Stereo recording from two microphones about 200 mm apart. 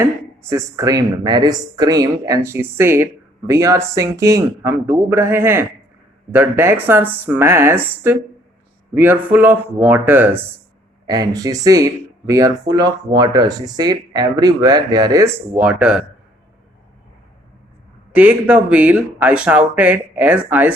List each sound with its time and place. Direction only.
0.0 s speech: 15° right (ahead or behind)
18.1 s speech: 5° right (ahead or behind)